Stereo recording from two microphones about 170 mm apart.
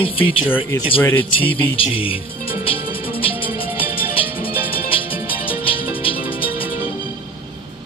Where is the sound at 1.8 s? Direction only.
30° left (ahead or behind).